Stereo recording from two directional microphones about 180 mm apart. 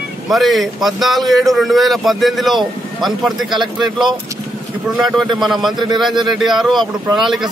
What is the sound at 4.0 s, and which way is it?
Speech, 25° right (ahead or behind).